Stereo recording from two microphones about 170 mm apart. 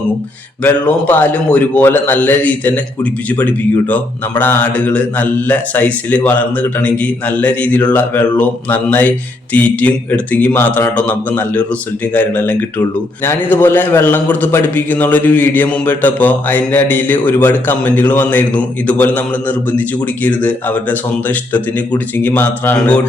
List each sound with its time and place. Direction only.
0.6 s a man's voice: 10° left (ahead or behind)